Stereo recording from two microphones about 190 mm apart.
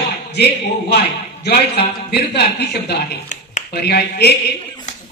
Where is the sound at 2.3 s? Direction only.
60° left (ahead or behind).